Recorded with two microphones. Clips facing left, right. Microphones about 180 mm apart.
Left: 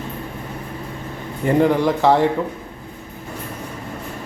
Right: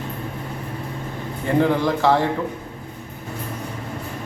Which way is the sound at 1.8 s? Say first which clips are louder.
Left 3 dB; 15° left (ahead or behind).